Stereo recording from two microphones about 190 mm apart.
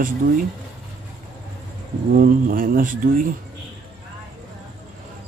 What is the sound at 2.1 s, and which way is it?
Speech, 45° right (ahead or behind).